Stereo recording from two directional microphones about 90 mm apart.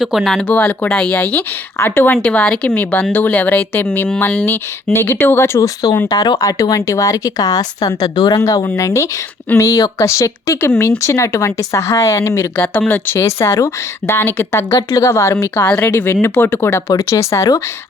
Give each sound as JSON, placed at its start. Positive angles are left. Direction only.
{"t": 0.0, "sound": "speech", "side_deg": 0}
{"t": 0.4, "sound": "speech", "side_deg": 15}
{"t": 5.5, "sound": "speech", "side_deg": 45}
{"t": 12.7, "sound": "speech", "side_deg": 20}
{"t": 14.8, "sound": "speech", "side_deg": 40}